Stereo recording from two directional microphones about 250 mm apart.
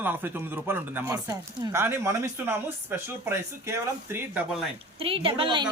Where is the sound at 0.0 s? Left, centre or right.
Centre.